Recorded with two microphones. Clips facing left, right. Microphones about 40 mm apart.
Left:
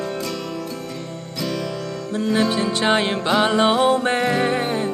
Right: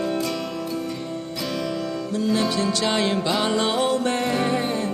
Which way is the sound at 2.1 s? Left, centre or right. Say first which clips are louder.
Left 3 dB; left.